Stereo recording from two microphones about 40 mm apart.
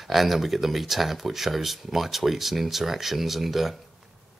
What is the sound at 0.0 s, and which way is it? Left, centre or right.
Speech, centre.